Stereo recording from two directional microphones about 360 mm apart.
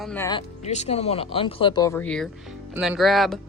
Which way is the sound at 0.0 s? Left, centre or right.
Centre.